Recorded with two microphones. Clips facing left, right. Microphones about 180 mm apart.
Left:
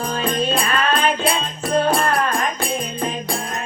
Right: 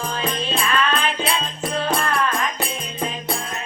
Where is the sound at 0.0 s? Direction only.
45° left (ahead or behind).